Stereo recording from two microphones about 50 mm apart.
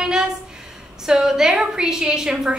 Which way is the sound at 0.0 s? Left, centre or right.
Centre.